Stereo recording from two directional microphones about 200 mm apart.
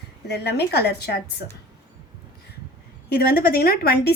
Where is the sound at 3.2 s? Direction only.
50° left (ahead or behind).